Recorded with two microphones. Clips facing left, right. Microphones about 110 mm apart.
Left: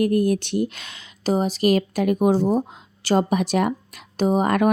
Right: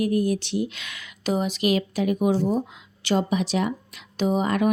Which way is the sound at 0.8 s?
35° left (ahead or behind).